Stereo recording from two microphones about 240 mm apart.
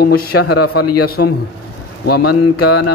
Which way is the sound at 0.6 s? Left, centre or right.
Left.